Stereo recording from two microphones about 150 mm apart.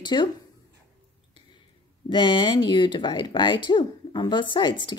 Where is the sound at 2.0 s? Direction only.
35° left (ahead or behind).